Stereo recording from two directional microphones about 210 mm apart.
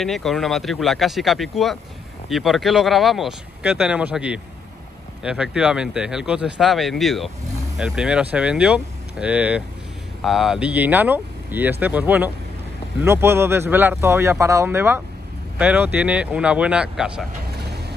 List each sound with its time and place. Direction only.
0.0 s speech: centre (ahead or behind)
17.5 s vehicle: 50° right (ahead or behind)